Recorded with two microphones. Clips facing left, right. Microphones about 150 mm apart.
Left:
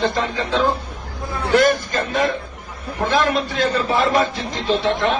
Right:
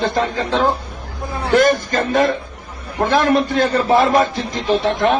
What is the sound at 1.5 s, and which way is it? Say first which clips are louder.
A man's voice: right 2 dB; 50° right (ahead or behind).